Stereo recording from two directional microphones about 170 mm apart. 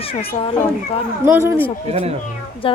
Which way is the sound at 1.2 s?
15° right (ahead or behind).